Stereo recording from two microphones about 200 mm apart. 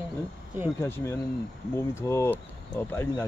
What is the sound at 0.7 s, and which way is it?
Speech, 10° left (ahead or behind).